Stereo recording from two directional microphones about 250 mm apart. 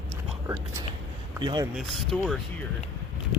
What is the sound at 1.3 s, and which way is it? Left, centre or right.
Speech, centre.